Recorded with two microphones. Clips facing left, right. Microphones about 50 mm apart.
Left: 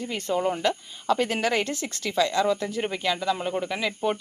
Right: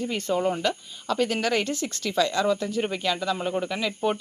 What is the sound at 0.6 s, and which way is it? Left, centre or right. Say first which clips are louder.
Speech: left 1 dB; centre.